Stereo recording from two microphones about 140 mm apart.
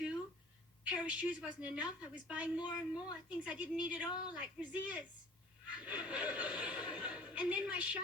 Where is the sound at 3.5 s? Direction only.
10° right (ahead or behind).